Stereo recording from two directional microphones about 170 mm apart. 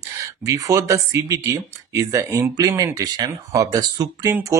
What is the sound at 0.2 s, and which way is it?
Speech, 20° right (ahead or behind).